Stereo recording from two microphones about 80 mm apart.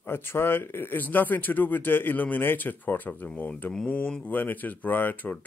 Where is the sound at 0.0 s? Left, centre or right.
Left.